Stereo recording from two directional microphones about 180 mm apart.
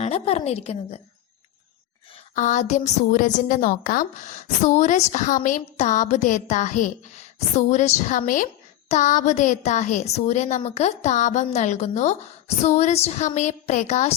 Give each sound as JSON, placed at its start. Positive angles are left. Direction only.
{"t": 0.0, "sound": "a woman's voice", "side_deg": 35}
{"t": 2.3, "sound": "a woman's voice", "side_deg": 45}